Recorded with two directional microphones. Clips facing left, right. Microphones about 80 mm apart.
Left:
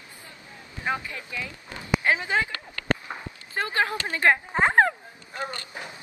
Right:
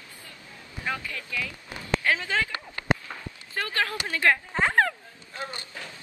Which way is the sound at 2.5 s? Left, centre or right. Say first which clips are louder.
Right 1 dB; centre.